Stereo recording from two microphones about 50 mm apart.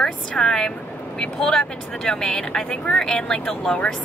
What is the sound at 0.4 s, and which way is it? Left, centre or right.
Speech, centre.